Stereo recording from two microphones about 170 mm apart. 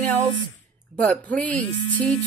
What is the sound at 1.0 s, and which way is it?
Speech, 10° left (ahead or behind).